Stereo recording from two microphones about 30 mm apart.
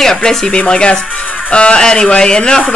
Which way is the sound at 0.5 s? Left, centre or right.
Left.